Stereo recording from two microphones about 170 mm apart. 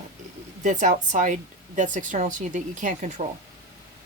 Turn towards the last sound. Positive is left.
turn(degrees=-45)  # may be behind; listen again after turning